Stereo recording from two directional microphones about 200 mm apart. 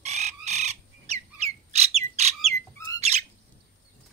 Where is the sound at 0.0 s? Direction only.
35° right (ahead or behind).